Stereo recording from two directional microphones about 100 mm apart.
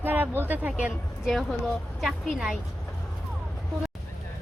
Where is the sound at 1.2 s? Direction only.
Centre (ahead or behind).